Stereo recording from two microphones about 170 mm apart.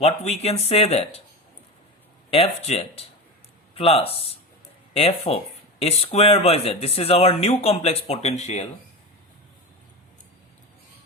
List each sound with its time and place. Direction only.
0.0 s speech: 40° left (ahead or behind)
2.3 s speech: 35° left (ahead or behind)